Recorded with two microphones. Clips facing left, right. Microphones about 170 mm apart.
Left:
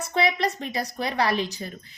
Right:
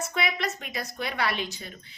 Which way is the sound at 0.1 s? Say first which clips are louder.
Left 10 dB; 35° left (ahead or behind).